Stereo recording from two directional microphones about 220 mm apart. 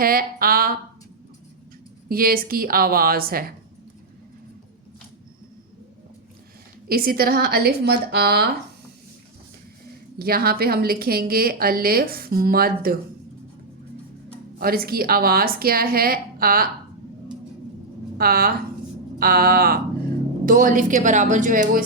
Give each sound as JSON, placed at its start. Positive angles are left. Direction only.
{"t": 0.0, "sound": "a woman's voice", "side_deg": -40}
{"t": 2.0, "sound": "a woman's voice", "side_deg": -40}
{"t": 6.8, "sound": "a woman's voice", "side_deg": -40}
{"t": 10.2, "sound": "a woman's voice", "side_deg": -45}
{"t": 14.6, "sound": "a woman's voice", "side_deg": -45}
{"t": 18.2, "sound": "a woman's voice", "side_deg": -40}